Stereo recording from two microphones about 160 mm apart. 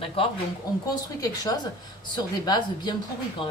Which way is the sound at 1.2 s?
25° left (ahead or behind).